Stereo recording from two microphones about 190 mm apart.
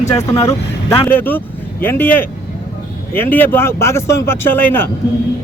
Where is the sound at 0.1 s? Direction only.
20° left (ahead or behind).